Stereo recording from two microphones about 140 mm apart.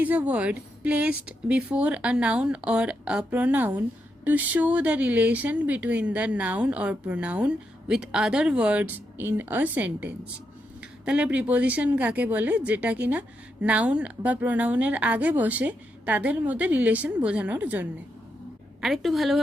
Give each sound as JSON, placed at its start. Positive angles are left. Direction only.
{"t": 0.0, "sound": "speech", "side_deg": -10}
{"t": 18.8, "sound": "a woman's voice", "side_deg": 0}